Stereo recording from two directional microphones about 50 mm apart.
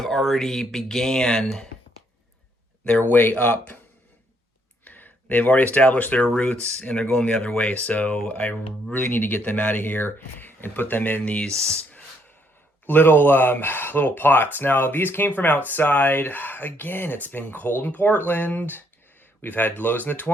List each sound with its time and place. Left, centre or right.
0.0 s speech: centre
3.1 s speech: left
4.9 s speech: left
11.3 s speech: centre
11.8 s a sound: left
12.8 s speech: left